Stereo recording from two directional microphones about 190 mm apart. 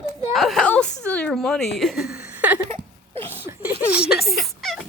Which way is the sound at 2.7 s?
30° right (ahead or behind).